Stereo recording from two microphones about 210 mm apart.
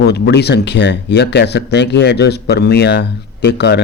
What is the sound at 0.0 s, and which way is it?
Speech, 50° left (ahead or behind).